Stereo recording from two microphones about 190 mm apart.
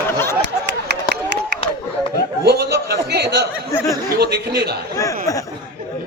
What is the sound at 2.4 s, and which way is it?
A man's voice, 60° right (ahead or behind).